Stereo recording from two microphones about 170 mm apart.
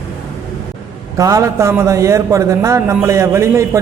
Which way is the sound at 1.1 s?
20° right (ahead or behind).